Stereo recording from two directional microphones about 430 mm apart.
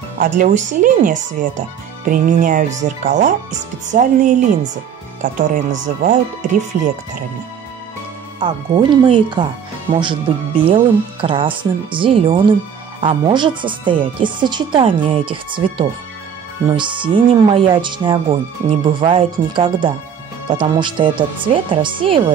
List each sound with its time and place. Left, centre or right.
0.2 s speech: centre
5.2 s speech: centre
8.4 s speech: centre